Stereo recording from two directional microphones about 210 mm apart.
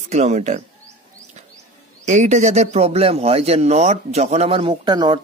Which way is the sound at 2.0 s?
35° right (ahead or behind).